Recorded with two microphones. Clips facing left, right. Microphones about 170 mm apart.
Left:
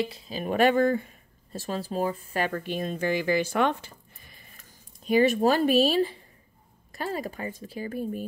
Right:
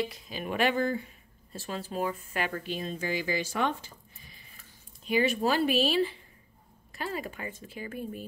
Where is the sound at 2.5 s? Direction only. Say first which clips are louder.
Left 4 dB; 50° left (ahead or behind).